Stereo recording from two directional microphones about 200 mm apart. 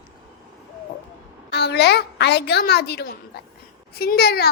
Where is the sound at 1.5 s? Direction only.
55° left (ahead or behind).